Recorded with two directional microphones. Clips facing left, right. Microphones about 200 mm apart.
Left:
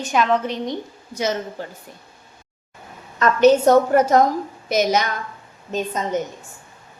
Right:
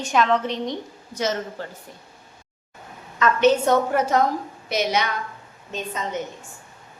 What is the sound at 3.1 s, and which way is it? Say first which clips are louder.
A woman's voice: left 4 dB; 40° left (ahead or behind).